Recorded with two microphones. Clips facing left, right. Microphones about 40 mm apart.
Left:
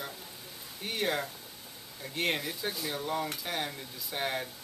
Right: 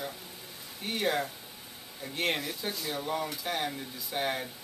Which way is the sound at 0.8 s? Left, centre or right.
Centre.